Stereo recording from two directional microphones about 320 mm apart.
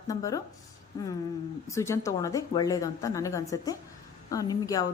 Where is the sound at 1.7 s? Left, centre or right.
Centre.